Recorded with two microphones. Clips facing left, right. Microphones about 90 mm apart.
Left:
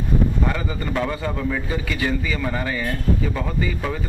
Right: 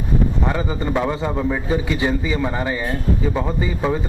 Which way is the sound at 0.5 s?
20° right (ahead or behind).